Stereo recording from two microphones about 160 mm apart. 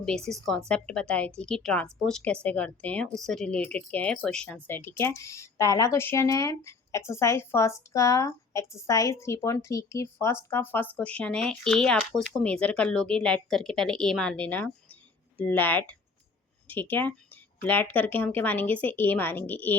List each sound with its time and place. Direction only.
0.0 s a woman's voice: 5° left (ahead or behind)